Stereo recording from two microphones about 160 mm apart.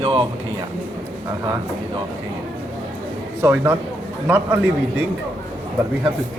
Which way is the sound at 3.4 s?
15° right (ahead or behind).